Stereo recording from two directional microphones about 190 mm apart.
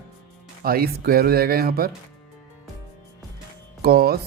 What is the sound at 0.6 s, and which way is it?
Speech, 50° right (ahead or behind).